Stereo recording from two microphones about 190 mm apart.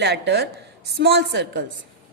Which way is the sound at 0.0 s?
65° right (ahead or behind).